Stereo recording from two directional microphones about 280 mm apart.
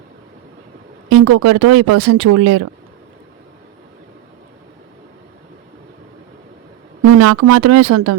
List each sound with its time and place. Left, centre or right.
1.1 s speech: right
7.2 s speech: right